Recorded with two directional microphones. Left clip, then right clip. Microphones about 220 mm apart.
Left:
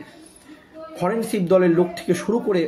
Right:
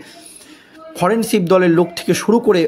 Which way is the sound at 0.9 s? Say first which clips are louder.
Right 7 dB; 45° right (ahead or behind).